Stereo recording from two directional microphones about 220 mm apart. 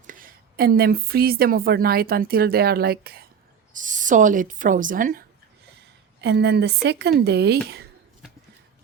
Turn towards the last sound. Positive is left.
turn(degrees=-45)  # may be behind; listen again after turning